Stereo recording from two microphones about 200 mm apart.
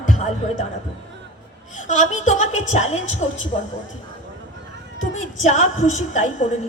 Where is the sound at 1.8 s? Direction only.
35° left (ahead or behind).